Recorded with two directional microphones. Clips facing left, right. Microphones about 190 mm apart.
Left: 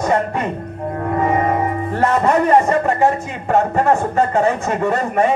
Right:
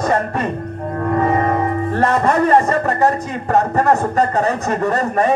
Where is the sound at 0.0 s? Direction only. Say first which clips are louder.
Even; 15° left (ahead or behind).